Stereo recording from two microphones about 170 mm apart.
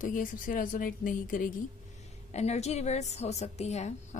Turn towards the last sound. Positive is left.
turn(degrees=40)  # may be behind; listen again after turning